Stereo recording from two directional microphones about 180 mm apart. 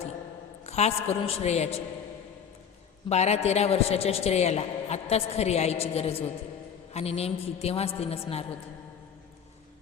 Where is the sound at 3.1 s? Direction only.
40° left (ahead or behind).